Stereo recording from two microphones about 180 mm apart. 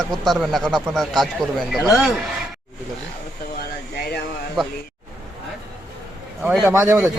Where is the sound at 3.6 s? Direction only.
60° left (ahead or behind).